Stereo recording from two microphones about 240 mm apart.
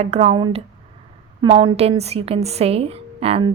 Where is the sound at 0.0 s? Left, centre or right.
Right.